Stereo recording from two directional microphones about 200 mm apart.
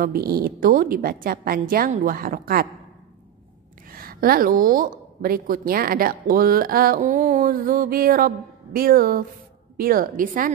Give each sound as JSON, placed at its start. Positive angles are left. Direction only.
{"t": 0.0, "sound": "a woman's voice", "side_deg": -45}
{"t": 3.9, "sound": "a woman's voice", "side_deg": -45}